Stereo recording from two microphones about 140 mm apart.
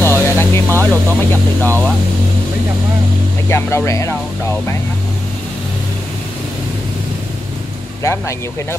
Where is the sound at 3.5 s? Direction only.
20° left (ahead or behind).